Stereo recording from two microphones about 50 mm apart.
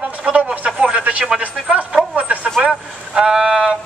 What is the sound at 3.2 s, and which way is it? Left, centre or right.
Speech, centre.